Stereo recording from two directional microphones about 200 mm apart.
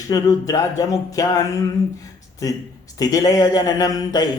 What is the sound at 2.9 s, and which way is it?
A man's voice, 15° left (ahead or behind).